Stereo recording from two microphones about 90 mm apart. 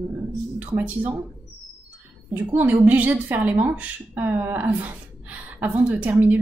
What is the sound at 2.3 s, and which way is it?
A woman's voice, 20° right (ahead or behind).